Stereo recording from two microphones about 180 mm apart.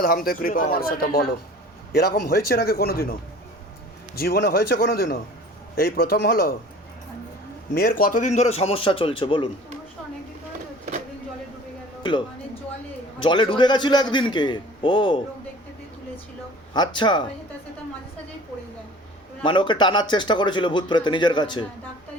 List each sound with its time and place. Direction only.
0.0 s speech: 55° left (ahead or behind)
7.7 s a man's voice: 55° left (ahead or behind); by 9.5 s 30° left (ahead or behind)
13.1 s speech: 25° left (ahead or behind)
16.7 s speech: 25° left (ahead or behind)
19.4 s speech: 25° left (ahead or behind)